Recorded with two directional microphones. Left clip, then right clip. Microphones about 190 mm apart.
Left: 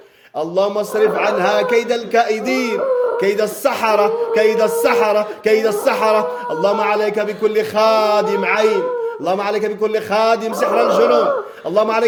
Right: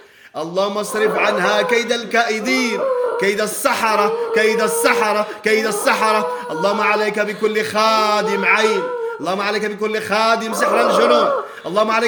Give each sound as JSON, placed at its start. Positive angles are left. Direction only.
{"t": 0.3, "sound": "a man's voice", "side_deg": -10}